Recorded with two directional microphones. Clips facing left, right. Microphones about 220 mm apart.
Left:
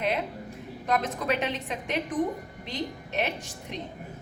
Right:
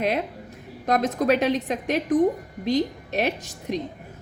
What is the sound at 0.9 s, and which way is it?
A woman's voice, 40° right (ahead or behind).